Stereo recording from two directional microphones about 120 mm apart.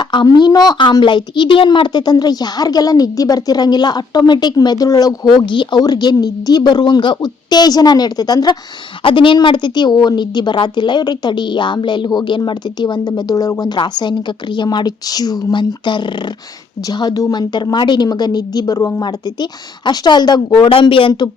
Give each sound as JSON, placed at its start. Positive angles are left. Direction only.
{"t": 0.0, "sound": "speech", "side_deg": 40}
{"t": 9.0, "sound": "speech", "side_deg": 45}